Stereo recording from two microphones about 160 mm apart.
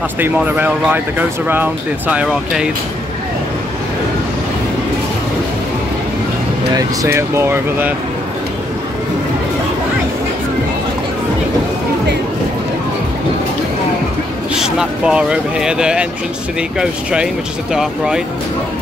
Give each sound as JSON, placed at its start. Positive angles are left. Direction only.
{"t": 0.2, "sound": "speech", "side_deg": -10}
{"t": 6.7, "sound": "speech", "side_deg": -20}
{"t": 14.5, "sound": "speech", "side_deg": -5}